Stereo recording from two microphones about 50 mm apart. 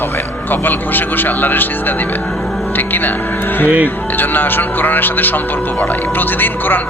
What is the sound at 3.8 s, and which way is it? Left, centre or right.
Speech, left.